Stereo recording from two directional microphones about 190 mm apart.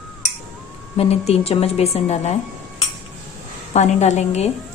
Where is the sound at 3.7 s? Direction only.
40° left (ahead or behind).